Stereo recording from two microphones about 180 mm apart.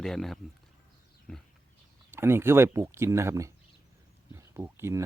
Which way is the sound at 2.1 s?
15° right (ahead or behind).